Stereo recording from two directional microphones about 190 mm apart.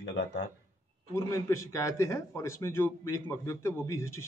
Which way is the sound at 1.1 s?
15° left (ahead or behind).